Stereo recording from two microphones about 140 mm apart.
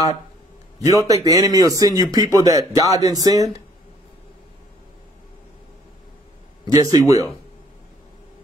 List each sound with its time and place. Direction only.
0.7 s a man's voice: 25° right (ahead or behind)
6.6 s a man's voice: 25° right (ahead or behind)